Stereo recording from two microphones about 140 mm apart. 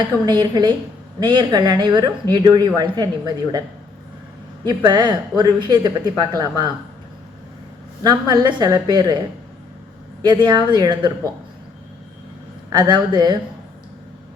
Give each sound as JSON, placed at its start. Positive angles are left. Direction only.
{"t": 0.3, "sound": "speech", "side_deg": -30}
{"t": 4.6, "sound": "speech", "side_deg": -30}
{"t": 8.0, "sound": "speech", "side_deg": -30}
{"t": 10.2, "sound": "speech", "side_deg": -30}
{"t": 12.7, "sound": "speech", "side_deg": -30}